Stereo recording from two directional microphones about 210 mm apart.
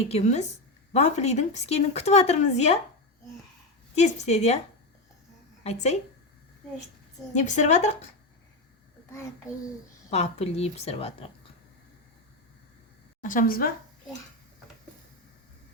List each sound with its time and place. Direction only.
0.0 s speech: 30° left (ahead or behind)
3.9 s speech: 30° left (ahead or behind)
5.6 s speech: 30° left (ahead or behind)
7.3 s speech: 35° left (ahead or behind)
10.1 s a woman's voice: 30° left (ahead or behind)
13.2 s speech: 40° left (ahead or behind)